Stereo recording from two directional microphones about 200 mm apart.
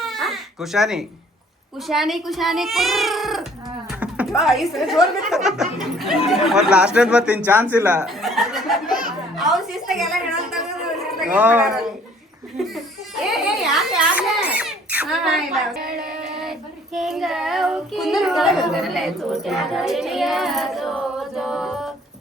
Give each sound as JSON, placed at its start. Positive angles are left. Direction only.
{"t": 0.0, "sound": "baby cry", "side_deg": 0}
{"t": 1.9, "sound": "speech", "side_deg": 0}
{"t": 3.8, "sound": "a sound", "side_deg": -5}
{"t": 4.4, "sound": "a woman's voice", "side_deg": 0}
{"t": 12.5, "sound": "laughter", "side_deg": 0}
{"t": 13.3, "sound": "a sound", "side_deg": 0}
{"t": 15.8, "sound": "music", "side_deg": -50}
{"t": 16.4, "sound": "child singing", "side_deg": 0}